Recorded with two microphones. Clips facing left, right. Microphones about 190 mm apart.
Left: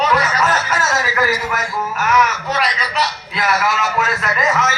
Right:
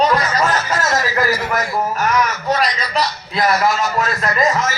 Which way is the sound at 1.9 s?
35° right (ahead or behind).